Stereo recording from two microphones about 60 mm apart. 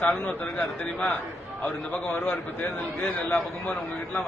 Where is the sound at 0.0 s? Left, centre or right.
Left.